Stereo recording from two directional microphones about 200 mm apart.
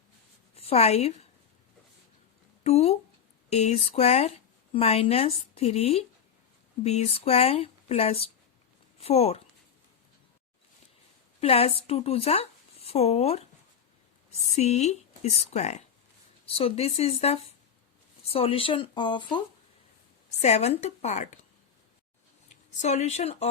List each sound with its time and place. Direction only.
0.5 s a woman's voice: 30° left (ahead or behind)
2.6 s speech: 30° left (ahead or behind)
11.3 s speech: 30° left (ahead or behind)
14.5 s speech: 35° left (ahead or behind)
20.4 s speech: 35° left (ahead or behind)
22.8 s speech: 35° left (ahead or behind)